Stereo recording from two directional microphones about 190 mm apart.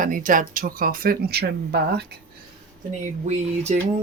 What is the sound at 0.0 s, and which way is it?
Speech, 45° right (ahead or behind).